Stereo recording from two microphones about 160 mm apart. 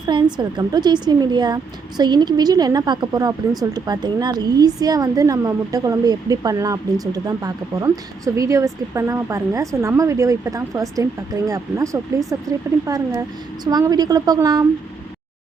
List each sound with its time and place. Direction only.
0.0 s a woman's voice: 30° right (ahead or behind)